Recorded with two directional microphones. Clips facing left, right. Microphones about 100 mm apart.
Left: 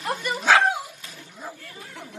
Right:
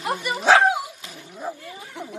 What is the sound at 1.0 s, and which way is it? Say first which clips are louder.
Roaring cats: right 6 dB; 10° right (ahead or behind).